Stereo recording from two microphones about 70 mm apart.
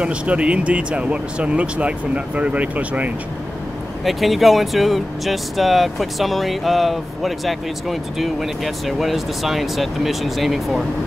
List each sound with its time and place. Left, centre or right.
0.0 s speech: centre
4.0 s speech: centre